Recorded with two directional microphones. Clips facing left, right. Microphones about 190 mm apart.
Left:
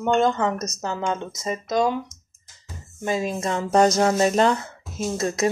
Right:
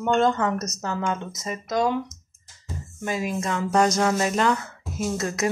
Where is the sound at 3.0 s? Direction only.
25° left (ahead or behind).